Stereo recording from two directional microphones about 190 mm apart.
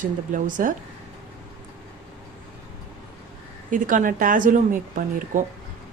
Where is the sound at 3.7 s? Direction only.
45° right (ahead or behind).